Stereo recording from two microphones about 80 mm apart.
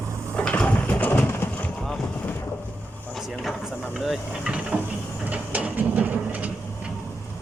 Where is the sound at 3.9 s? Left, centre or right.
Centre.